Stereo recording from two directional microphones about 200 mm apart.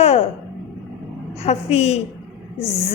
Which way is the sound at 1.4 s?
30° left (ahead or behind).